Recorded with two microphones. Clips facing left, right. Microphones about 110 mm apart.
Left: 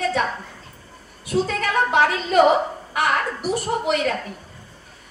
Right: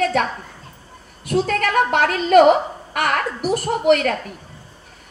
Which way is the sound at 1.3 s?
60° right (ahead or behind).